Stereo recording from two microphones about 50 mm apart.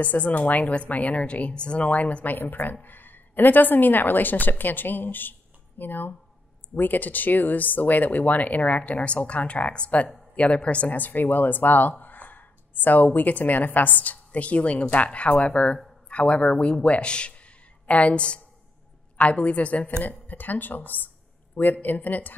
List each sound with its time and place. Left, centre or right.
0.0 s a woman's voice: left
2.3 s a woman's voice: left